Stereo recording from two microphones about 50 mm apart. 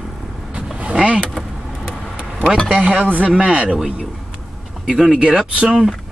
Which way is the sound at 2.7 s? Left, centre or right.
Right.